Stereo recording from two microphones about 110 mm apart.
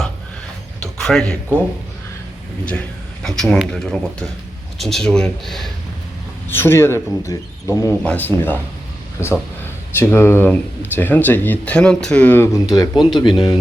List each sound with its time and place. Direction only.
0.8 s a sound: 5° left (ahead or behind)
3.2 s speech: 5° left (ahead or behind)
6.5 s speech: 20° left (ahead or behind)
8.0 s speech: 15° left (ahead or behind)
12.5 s speech: 35° left (ahead or behind)